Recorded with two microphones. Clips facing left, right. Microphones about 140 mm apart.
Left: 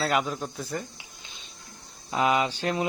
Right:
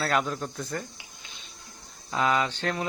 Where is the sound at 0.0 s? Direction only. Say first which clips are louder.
Left 1 dB; 10° left (ahead or behind).